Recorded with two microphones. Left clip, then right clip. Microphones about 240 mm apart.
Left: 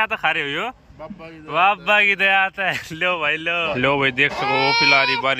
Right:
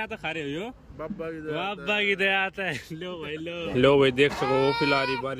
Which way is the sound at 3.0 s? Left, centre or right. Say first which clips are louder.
Left 15 dB; left.